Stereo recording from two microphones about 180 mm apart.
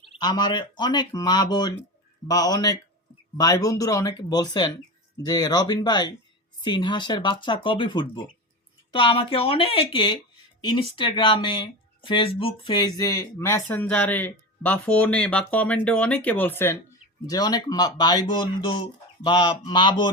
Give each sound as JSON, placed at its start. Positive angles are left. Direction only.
{"t": 0.2, "sound": "speech", "side_deg": 25}